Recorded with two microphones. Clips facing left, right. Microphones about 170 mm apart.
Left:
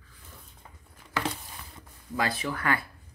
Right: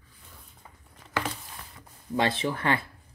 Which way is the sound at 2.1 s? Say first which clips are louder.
Right 3 dB; 25° right (ahead or behind).